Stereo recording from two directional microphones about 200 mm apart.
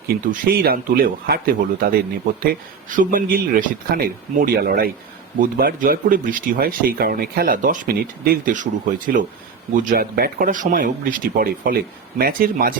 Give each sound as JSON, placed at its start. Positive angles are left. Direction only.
{"t": 0.3, "sound": "speech", "side_deg": -50}